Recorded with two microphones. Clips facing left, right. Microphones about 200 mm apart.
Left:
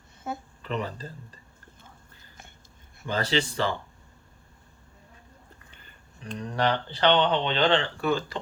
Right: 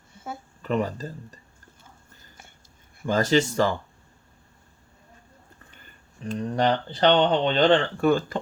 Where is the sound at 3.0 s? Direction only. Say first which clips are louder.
Right 6 dB; 45° right (ahead or behind).